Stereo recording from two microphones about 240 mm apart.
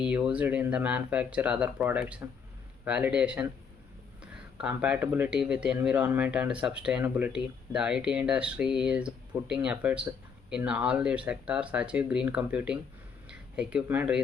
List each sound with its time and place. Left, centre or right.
0.0 s speech: centre